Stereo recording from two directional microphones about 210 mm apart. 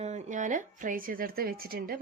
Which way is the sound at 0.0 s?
30° right (ahead or behind).